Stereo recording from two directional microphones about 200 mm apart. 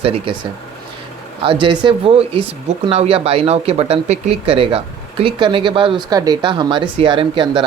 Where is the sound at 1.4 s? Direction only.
25° right (ahead or behind).